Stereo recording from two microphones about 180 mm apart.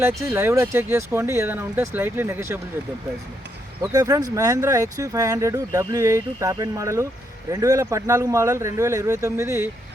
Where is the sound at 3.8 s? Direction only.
20° right (ahead or behind).